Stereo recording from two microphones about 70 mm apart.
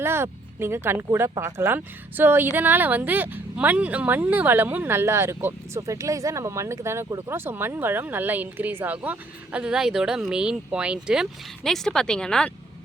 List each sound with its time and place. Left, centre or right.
0.0 s speech: right
4.9 s speech: right
5.8 s speech: right; by 11.3 s centre
11.6 s speech: centre